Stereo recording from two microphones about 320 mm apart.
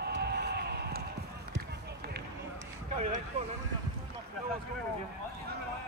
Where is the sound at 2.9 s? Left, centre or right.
Right.